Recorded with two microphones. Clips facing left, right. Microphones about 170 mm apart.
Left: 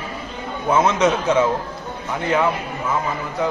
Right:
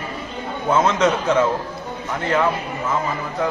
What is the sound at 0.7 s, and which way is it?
Speech, 15° left (ahead or behind).